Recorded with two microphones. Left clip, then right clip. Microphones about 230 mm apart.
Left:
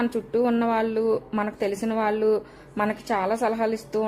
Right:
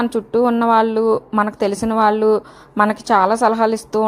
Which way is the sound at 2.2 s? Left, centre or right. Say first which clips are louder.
Right 7 dB; centre.